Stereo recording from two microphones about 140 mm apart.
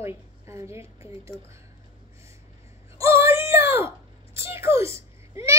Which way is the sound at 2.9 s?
20° right (ahead or behind).